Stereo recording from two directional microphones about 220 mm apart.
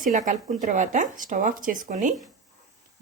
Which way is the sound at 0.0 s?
35° right (ahead or behind).